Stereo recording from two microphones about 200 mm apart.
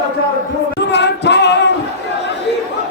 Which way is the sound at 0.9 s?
60° left (ahead or behind).